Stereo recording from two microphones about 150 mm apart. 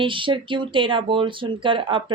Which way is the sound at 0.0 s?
35° right (ahead or behind).